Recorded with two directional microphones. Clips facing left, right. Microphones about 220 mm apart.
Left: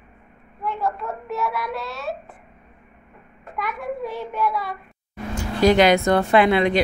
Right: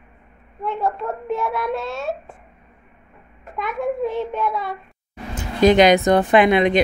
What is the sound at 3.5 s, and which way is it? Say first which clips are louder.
Speech: right 5 dB; 25° right (ahead or behind).